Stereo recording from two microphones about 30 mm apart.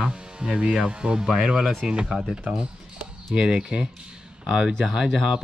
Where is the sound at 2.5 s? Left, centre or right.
Right.